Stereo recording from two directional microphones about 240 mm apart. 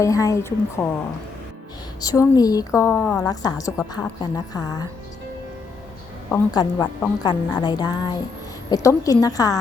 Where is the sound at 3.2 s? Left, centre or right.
Centre.